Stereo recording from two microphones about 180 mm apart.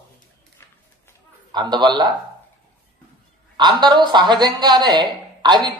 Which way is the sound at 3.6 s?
25° right (ahead or behind).